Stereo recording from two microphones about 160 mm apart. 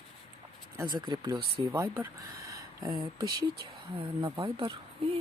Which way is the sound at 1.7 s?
15° right (ahead or behind).